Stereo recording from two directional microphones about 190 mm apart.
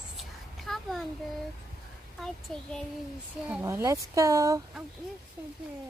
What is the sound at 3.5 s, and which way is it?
Speech, 10° right (ahead or behind).